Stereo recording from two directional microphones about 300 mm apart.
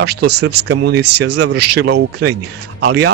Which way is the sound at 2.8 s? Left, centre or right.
Right.